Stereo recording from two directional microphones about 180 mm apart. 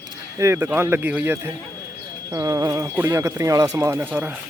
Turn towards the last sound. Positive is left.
turn(degrees=-10)  # may be behind; listen again after turning